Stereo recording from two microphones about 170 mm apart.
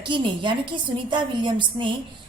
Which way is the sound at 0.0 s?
30° right (ahead or behind).